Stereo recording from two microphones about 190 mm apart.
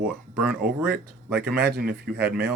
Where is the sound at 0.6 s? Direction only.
55° right (ahead or behind).